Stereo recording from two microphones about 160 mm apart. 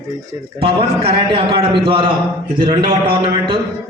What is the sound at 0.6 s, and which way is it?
A man's voice, 35° right (ahead or behind).